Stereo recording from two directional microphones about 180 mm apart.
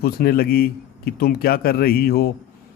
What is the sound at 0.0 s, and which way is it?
Speech, 60° left (ahead or behind).